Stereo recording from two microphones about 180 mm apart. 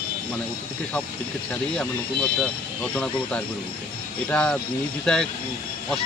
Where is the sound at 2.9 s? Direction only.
5° left (ahead or behind).